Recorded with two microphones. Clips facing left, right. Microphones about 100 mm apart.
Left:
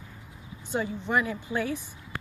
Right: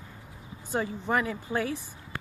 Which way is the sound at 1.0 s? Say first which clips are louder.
Left 1 dB; 40° right (ahead or behind).